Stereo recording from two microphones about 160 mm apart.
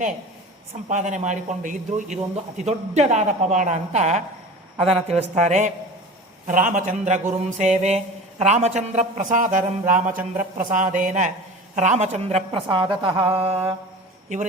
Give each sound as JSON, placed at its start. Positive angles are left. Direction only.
{"t": 0.9, "sound": "a woman's voice", "side_deg": -50}
{"t": 4.8, "sound": "a woman's voice", "side_deg": 5}
{"t": 5.0, "sound": "a woman's voice", "side_deg": -45}